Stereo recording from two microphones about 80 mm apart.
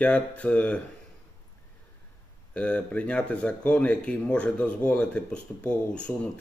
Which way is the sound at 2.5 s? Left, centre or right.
Centre.